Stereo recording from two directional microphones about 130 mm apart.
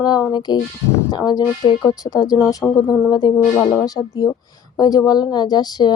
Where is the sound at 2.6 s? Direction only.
Centre (ahead or behind).